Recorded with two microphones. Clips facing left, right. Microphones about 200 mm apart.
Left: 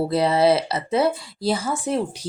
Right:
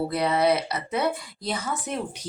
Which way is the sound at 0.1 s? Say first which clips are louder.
Left 5 dB; 30° left (ahead or behind).